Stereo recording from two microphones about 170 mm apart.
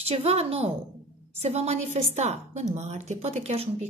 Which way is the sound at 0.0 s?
40° right (ahead or behind).